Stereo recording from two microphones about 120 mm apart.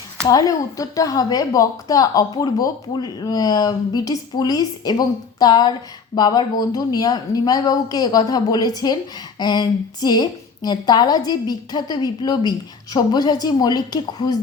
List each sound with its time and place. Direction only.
0.3 s speech: 30° left (ahead or behind)